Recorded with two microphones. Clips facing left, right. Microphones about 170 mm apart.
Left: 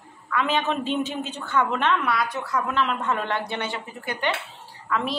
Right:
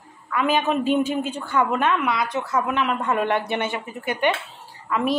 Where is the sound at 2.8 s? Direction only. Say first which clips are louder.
Right 3 dB; 10° right (ahead or behind).